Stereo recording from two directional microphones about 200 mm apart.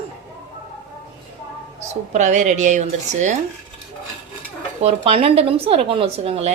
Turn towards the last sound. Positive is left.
turn(degrees=-30)  # may be behind; listen again after turning